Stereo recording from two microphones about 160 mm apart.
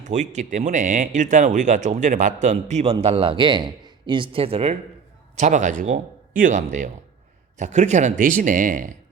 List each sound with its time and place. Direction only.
0.0 s speech: 50° right (ahead or behind)
5.4 s speech: 50° right (ahead or behind)